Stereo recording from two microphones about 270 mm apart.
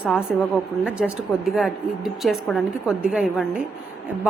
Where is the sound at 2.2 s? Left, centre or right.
Centre.